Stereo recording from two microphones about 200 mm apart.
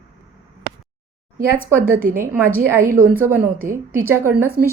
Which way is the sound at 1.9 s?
40° right (ahead or behind).